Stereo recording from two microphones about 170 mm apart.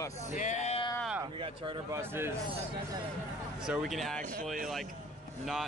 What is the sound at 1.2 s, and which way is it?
Speech, 25° right (ahead or behind).